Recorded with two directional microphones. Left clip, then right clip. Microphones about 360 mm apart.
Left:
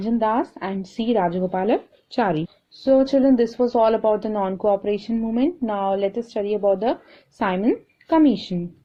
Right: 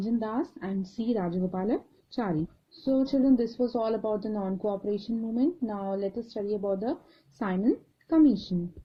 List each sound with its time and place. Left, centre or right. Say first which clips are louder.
0.0 s speech: left 10 dB; left